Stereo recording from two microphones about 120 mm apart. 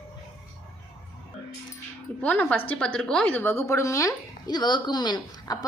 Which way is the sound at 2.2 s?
10° left (ahead or behind).